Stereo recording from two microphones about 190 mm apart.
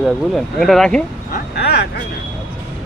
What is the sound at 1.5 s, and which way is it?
Speech, 60° left (ahead or behind).